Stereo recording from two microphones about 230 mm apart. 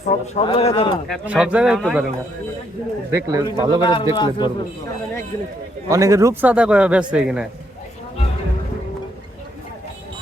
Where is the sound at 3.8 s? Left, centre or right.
Left.